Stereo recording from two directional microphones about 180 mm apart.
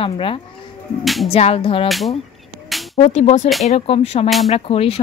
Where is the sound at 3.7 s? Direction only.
35° left (ahead or behind).